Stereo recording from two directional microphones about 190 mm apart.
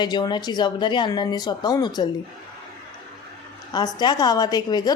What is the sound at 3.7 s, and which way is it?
A woman's voice, 20° left (ahead or behind).